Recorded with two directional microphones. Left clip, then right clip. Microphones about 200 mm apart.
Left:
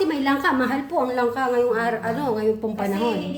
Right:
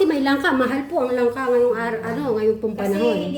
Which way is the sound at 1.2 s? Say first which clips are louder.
Right 4 dB; 35° left (ahead or behind).